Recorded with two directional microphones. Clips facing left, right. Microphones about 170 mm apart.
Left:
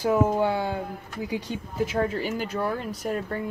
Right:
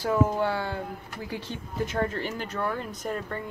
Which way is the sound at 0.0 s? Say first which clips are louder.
Left 3 dB; 15° left (ahead or behind).